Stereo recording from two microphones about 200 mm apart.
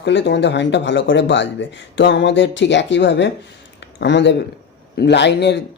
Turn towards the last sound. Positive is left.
turn(degrees=60)  # may be behind; listen again after turning